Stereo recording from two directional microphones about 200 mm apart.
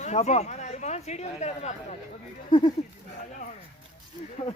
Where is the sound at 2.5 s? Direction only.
25° left (ahead or behind).